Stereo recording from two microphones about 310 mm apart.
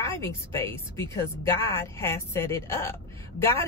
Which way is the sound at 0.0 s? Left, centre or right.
Centre.